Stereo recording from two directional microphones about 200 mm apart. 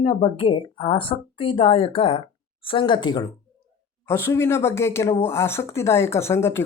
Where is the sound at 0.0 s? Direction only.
25° left (ahead or behind).